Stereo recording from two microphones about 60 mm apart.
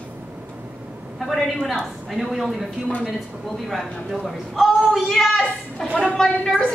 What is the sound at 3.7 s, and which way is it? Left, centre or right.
A man's voice, centre.